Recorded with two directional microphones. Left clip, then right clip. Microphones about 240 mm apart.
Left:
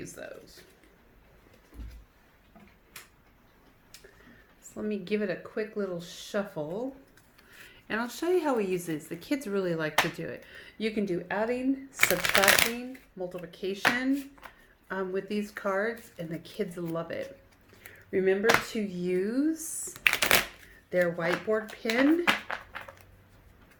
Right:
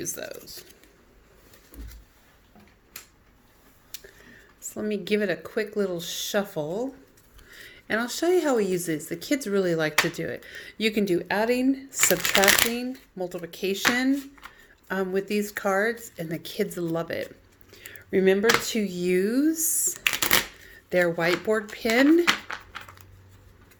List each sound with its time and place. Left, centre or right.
0.0 s speech: right
3.9 s a sound: right
4.7 s speech: right
11.9 s speech: centre
13.1 s speech: right
14.8 s speech: right
20.9 s speech: right
21.9 s speech: centre